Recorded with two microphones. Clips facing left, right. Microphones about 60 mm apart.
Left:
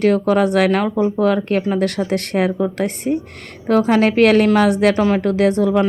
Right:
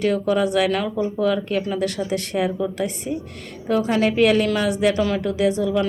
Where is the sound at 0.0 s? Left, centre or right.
Left.